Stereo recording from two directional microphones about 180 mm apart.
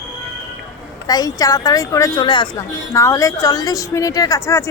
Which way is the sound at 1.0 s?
20° left (ahead or behind).